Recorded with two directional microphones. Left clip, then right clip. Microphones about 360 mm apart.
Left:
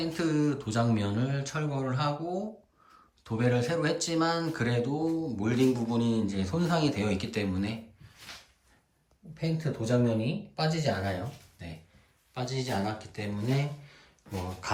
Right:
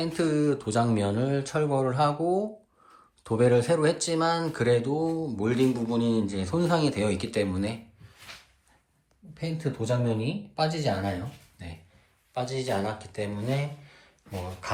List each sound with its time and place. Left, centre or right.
0.0 s speech: centre
9.3 s speech: centre
9.8 s speech: right
10.6 s speech: centre
13.8 s a sound: centre
14.6 s speech: centre